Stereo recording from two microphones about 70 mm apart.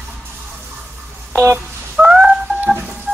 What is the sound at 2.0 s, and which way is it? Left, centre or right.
Telephone dialing, centre.